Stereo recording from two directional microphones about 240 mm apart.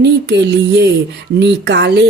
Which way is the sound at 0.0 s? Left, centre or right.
Right.